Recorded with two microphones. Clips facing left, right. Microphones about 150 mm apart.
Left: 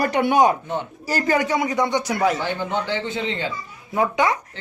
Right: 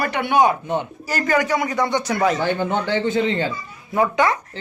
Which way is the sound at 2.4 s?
50° right (ahead or behind).